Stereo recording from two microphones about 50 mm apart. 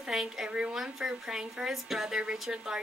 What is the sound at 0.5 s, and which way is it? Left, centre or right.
Speech, right.